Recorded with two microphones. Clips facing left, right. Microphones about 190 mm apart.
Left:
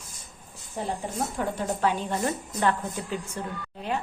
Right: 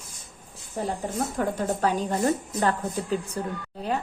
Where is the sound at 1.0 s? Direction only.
40° right (ahead or behind).